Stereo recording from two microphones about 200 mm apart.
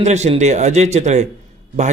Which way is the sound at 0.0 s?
35° right (ahead or behind).